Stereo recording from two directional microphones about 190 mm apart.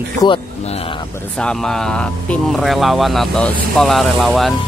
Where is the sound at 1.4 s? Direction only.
5° left (ahead or behind).